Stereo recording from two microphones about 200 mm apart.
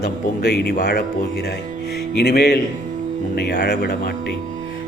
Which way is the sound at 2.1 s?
55° left (ahead or behind).